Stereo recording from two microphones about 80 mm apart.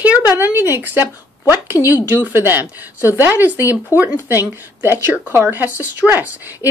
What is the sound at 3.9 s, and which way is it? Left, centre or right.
Speech, left.